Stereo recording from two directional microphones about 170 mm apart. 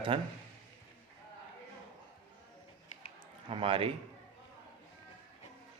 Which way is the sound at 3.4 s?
30° right (ahead or behind).